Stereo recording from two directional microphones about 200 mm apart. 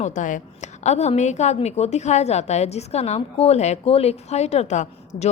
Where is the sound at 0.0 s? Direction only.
40° left (ahead or behind).